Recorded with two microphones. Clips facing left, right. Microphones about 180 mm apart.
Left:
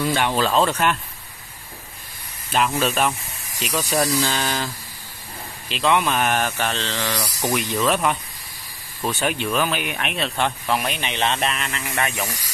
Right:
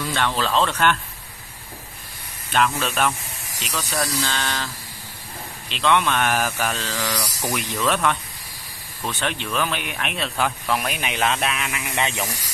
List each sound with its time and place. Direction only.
0.1 s speech: 10° left (ahead or behind)
2.5 s speech: 5° left (ahead or behind)
5.7 s speech: 5° left (ahead or behind)
12.0 s speech: 20° right (ahead or behind)